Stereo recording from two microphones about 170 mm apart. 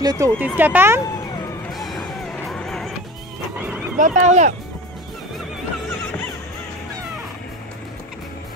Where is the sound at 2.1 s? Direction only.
Centre (ahead or behind).